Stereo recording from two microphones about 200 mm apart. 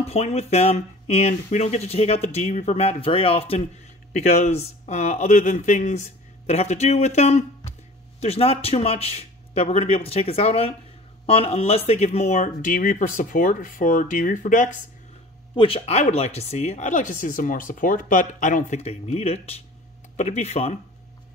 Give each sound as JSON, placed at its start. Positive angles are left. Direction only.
{"t": 0.1, "sound": "speech", "side_deg": 30}
{"t": 15.5, "sound": "speech", "side_deg": 25}